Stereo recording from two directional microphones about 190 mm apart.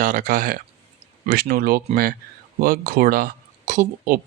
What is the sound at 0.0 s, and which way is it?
A man's voice, 45° right (ahead or behind).